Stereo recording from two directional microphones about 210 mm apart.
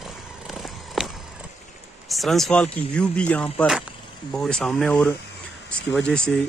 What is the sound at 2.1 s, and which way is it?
Speech, centre (ahead or behind).